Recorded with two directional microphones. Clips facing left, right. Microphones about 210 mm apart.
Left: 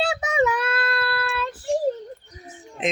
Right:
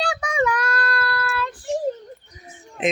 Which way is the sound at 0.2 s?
25° left (ahead or behind).